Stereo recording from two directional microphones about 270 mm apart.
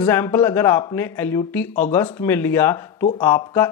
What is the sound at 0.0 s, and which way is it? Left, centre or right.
Speech, centre.